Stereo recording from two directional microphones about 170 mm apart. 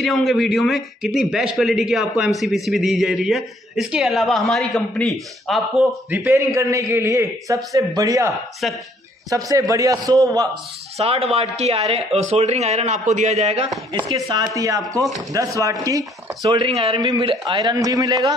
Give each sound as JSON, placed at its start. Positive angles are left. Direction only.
{"t": 0.0, "sound": "a man's voice", "side_deg": 0}
{"t": 6.0, "sound": "a man's voice", "side_deg": -15}
{"t": 8.6, "sound": "a man's voice", "side_deg": 0}
{"t": 9.3, "sound": "a man's voice", "side_deg": -20}
{"t": 11.0, "sound": "speech", "side_deg": -35}
{"t": 13.9, "sound": "a man's voice", "side_deg": -25}
{"t": 16.4, "sound": "a man's voice", "side_deg": -30}